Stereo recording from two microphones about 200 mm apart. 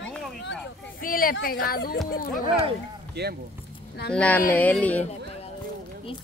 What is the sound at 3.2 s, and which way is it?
Speech, 55° right (ahead or behind).